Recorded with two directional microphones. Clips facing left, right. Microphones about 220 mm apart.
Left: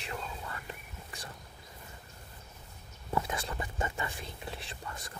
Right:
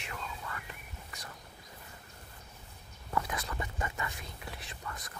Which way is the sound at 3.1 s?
25° left (ahead or behind).